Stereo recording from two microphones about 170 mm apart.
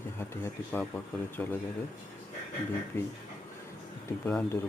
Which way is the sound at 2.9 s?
10° left (ahead or behind).